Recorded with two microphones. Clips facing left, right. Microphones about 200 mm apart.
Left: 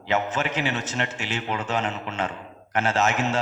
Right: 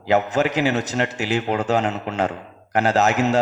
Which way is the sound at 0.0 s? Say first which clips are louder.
Right 6 dB; 40° right (ahead or behind).